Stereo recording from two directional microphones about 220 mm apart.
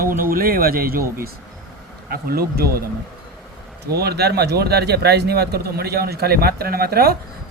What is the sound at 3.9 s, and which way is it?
Speech, 45° right (ahead or behind).